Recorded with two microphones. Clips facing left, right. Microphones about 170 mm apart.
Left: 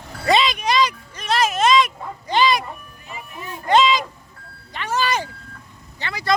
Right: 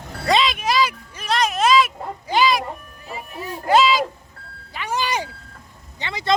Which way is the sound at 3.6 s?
5° right (ahead or behind).